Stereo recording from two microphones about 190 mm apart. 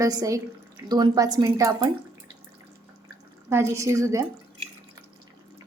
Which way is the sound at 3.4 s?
15° right (ahead or behind).